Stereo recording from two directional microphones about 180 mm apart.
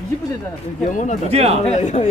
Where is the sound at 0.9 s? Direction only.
45° left (ahead or behind).